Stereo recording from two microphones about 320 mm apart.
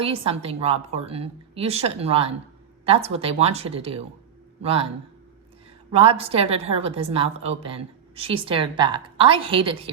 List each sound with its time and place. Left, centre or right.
0.0 s a woman's voice: centre
5.9 s a woman's voice: centre